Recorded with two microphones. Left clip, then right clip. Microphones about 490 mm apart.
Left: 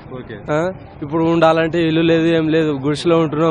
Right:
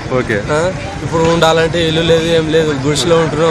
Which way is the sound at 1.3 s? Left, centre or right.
Left.